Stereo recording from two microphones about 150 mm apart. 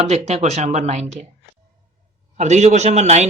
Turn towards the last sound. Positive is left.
turn(degrees=-50)  # may be behind; listen again after turning